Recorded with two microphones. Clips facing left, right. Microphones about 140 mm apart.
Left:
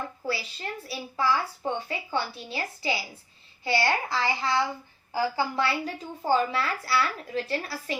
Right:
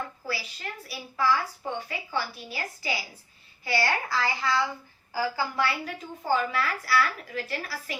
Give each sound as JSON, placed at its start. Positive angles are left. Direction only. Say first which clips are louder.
{"t": 0.3, "sound": "a woman's voice", "louder": "left 3 dB", "side_deg": 25}